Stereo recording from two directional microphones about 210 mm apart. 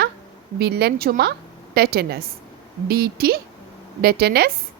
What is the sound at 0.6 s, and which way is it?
A woman's voice, 50° right (ahead or behind).